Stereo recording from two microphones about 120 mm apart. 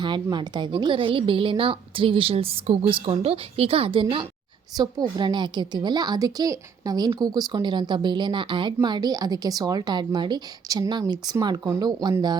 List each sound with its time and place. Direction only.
0.0 s a woman's voice: 40° right (ahead or behind)